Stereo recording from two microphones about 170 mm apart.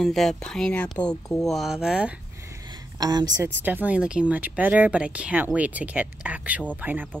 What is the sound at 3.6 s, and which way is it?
A woman's voice, 10° right (ahead or behind).